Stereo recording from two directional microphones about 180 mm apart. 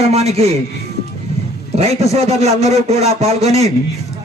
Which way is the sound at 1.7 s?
35° right (ahead or behind).